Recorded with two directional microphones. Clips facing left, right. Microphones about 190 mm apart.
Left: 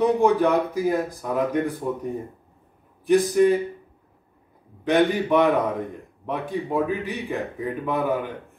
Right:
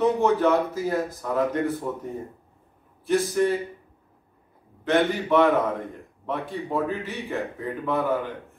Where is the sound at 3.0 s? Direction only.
15° left (ahead or behind).